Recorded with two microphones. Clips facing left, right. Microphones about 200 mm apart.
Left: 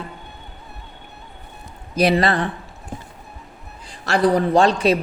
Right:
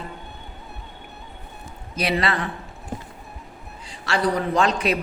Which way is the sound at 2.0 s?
40° left (ahead or behind).